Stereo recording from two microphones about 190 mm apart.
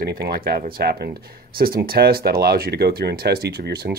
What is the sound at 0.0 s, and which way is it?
Speech, 55° right (ahead or behind).